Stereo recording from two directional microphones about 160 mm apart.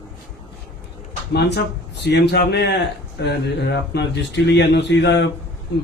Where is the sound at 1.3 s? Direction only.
90° left.